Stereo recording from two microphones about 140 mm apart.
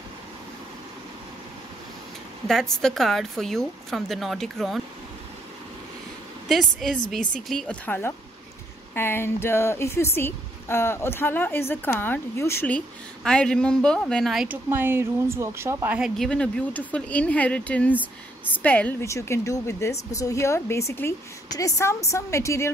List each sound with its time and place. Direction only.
2.4 s a woman's voice: 5° left (ahead or behind)
6.5 s a woman's voice: centre (ahead or behind)
14.5 s speech: 15° right (ahead or behind)
16.0 s a woman's voice: 5° left (ahead or behind); by 22.7 s 20° left (ahead or behind)